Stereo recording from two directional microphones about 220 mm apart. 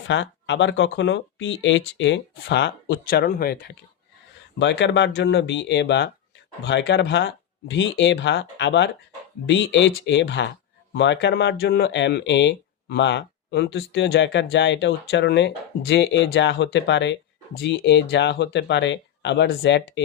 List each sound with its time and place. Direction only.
0.1 s speech: 55° left (ahead or behind)
4.6 s speech: 55° left (ahead or behind)